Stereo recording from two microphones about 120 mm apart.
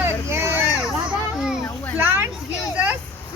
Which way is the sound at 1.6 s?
15° left (ahead or behind).